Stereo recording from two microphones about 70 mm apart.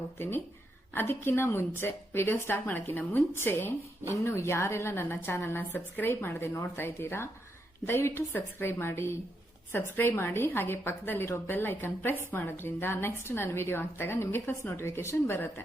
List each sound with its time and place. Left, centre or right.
0.2 s a woman's voice: left
4.1 s a woman's voice: left